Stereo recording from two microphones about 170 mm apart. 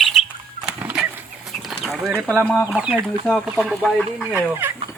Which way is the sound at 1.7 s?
5° right (ahead or behind).